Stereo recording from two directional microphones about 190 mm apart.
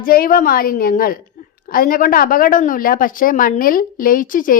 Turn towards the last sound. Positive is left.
turn(degrees=45)  # may be behind; listen again after turning